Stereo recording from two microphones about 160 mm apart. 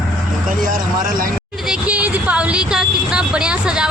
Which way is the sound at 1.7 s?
10° right (ahead or behind).